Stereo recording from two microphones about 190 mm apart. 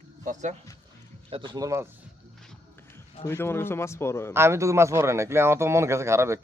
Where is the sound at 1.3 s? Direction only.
25° right (ahead or behind).